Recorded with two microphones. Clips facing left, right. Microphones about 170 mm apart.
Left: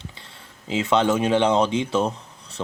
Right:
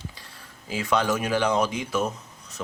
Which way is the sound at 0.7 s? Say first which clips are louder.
Left 4 dB; 25° left (ahead or behind).